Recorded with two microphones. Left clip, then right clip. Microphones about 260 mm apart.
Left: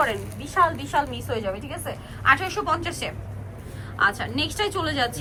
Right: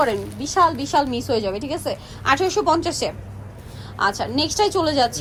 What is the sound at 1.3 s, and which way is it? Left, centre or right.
A woman's voice, right.